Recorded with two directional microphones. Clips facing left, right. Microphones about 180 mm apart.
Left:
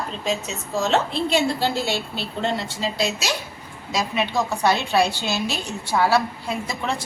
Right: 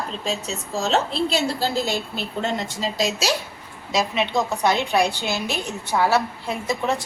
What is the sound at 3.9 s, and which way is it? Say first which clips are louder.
A woman's voice: right 2 dB; 25° right (ahead or behind).